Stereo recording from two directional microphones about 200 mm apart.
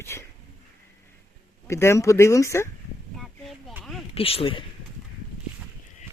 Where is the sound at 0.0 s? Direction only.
15° left (ahead or behind).